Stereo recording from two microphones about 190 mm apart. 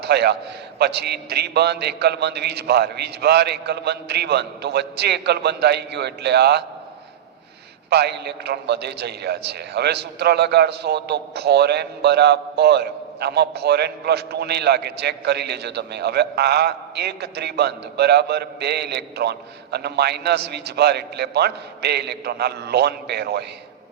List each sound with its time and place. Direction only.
0.0 s a man's voice: 60° right (ahead or behind)
7.9 s a man's voice: 60° right (ahead or behind)